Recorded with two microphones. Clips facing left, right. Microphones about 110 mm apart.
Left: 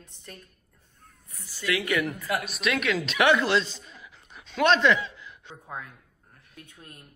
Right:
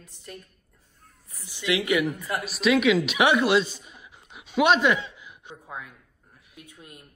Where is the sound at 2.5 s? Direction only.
Centre (ahead or behind).